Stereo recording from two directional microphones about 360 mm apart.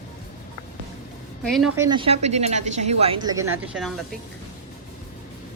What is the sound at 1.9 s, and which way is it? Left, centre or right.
A woman's voice, centre.